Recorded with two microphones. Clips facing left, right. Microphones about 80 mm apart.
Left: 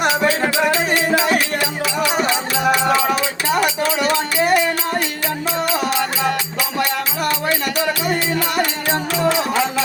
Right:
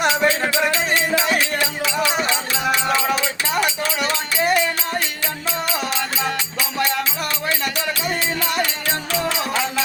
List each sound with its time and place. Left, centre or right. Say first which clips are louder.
0.4 s music: left 3 dB; centre
8.5 s music: left 4 dB; left